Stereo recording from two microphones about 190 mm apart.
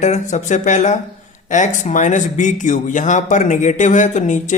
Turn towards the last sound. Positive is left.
turn(degrees=40)  # may be behind; listen again after turning